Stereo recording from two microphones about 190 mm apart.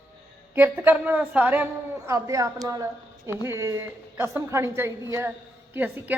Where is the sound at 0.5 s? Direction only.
10° right (ahead or behind).